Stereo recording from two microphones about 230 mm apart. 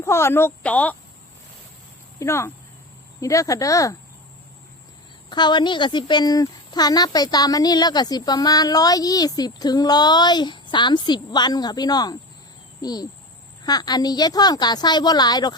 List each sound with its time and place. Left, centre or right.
0.0 s speech: centre
2.1 s speech: centre
5.3 s speech: centre